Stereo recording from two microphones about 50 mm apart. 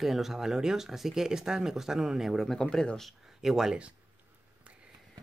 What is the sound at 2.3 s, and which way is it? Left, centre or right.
Speech, centre.